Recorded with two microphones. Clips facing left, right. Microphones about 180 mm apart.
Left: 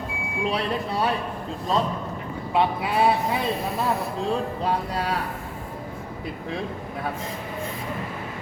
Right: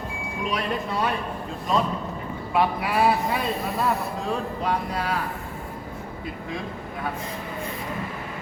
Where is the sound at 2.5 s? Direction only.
25° left (ahead or behind).